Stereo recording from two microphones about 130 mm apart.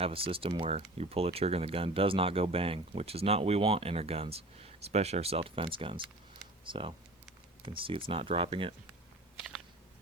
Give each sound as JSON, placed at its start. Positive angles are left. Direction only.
{"t": 0.0, "sound": "speech", "side_deg": -45}